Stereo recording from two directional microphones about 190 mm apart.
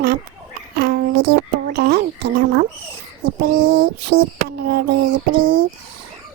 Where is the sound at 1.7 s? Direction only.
55° right (ahead or behind).